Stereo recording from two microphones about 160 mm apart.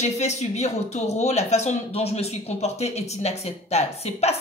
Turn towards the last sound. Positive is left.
turn(degrees=40)  # may be behind; listen again after turning